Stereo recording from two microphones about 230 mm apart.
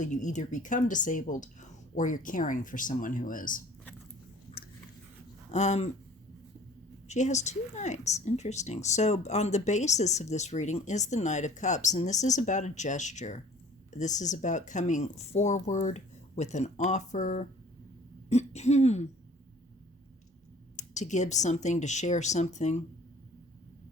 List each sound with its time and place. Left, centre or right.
0.0 s speech: left
4.5 s chewing: left
5.5 s speech: left
7.1 s speech: left
20.7 s speech: left